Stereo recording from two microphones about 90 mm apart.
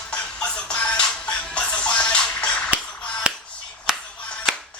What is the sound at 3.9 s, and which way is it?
Music, 5° right (ahead or behind).